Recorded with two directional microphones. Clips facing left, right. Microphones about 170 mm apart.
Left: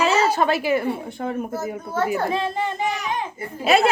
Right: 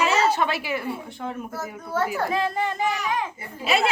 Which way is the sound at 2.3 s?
25° left (ahead or behind).